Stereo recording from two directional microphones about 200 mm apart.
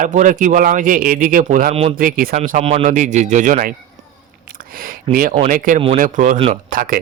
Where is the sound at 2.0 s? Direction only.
45° right (ahead or behind).